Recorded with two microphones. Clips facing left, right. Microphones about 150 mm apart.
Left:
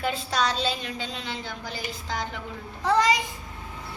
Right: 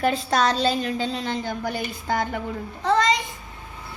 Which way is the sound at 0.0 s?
50° right (ahead or behind).